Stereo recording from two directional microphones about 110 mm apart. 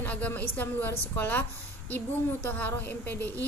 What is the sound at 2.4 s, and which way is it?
Speech, 15° left (ahead or behind).